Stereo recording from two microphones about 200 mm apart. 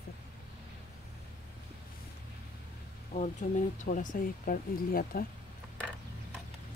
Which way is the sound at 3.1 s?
35° left (ahead or behind).